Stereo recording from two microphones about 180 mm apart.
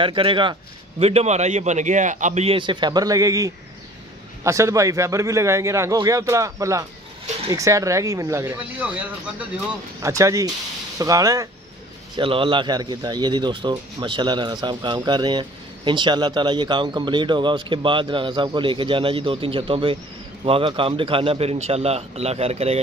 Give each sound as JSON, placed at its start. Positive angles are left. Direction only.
{"t": 0.0, "sound": "a man's voice", "side_deg": -30}
{"t": 12.2, "sound": "a man's voice", "side_deg": -30}